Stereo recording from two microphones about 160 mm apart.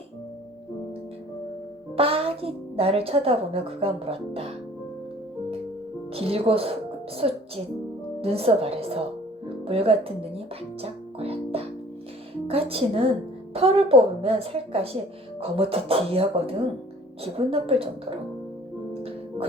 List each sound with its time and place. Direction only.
2.0 s a woman's voice: 35° right (ahead or behind)
6.1 s a woman's voice: 35° right (ahead or behind)